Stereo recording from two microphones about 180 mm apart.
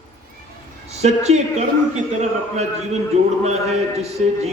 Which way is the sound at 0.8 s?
35° right (ahead or behind).